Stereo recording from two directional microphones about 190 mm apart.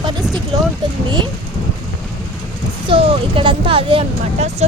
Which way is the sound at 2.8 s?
25° right (ahead or behind).